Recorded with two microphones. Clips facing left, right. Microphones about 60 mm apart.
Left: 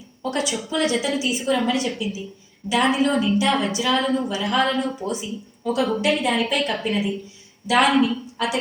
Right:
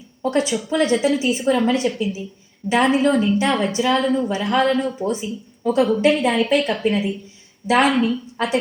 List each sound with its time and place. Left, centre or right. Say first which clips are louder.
0.2 s a woman's voice: right 5 dB; right